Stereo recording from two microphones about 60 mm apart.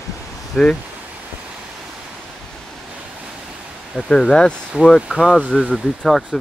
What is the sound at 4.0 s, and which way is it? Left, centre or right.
Speech, centre.